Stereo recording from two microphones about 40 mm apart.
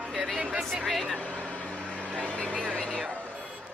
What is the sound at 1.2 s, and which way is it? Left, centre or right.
Vehicle, left.